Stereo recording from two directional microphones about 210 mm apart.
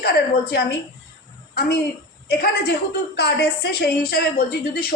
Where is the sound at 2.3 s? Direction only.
50° left (ahead or behind).